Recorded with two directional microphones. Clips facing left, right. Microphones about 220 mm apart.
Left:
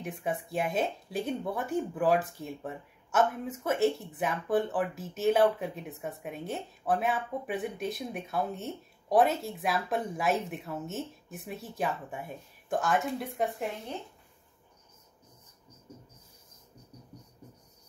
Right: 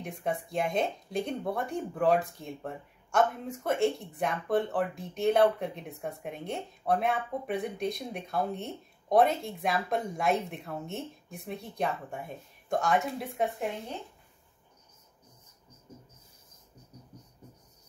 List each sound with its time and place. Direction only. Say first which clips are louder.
0.0 s speech: even; 5° left (ahead or behind)